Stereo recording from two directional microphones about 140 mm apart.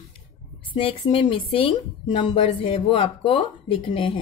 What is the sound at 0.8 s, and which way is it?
A woman's voice, 40° left (ahead or behind).